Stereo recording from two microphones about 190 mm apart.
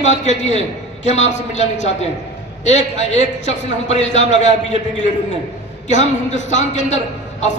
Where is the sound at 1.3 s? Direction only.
40° left (ahead or behind).